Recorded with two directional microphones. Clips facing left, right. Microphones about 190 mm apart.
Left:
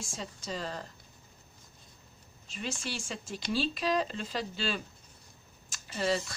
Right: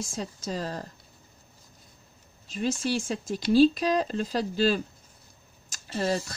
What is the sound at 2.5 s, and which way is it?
Speech, 40° right (ahead or behind).